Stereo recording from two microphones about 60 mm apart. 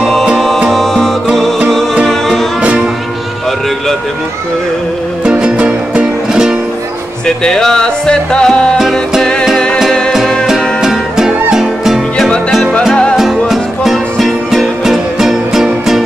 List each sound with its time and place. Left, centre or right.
0.0 s music: centre
2.6 s music: right
5.3 s music: centre
7.2 s music: centre
10.4 s music: centre
13.1 s music: centre